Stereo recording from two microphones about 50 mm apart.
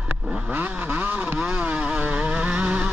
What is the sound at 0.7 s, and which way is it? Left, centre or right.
Vehicle, right.